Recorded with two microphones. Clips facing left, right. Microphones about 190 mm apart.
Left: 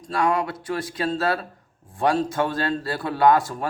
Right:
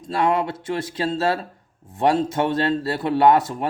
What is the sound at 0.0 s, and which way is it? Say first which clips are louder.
Speech: right 2 dB; 25° right (ahead or behind).